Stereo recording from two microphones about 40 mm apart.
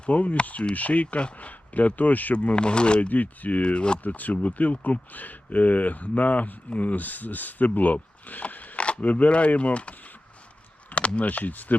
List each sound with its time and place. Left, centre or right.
0.0 s speech: left
2.3 s speech: left
3.1 s speech: left
3.6 s speech: left
4.0 s speech: left
8.3 s mechanisms: left
8.8 s speech: left
10.9 s speech: left
11.3 s speech: left